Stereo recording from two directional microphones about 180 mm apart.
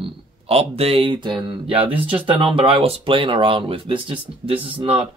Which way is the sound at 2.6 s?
30° right (ahead or behind).